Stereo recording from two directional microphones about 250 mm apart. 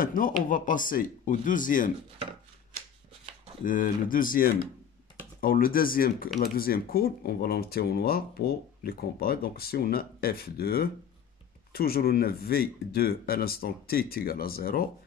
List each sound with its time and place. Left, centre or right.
0.0 s speech: left
3.6 s speech: left